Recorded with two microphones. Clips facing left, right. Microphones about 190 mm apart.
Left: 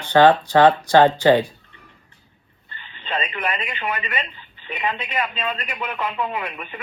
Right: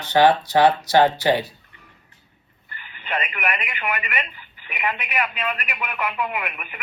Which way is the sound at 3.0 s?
25° left (ahead or behind).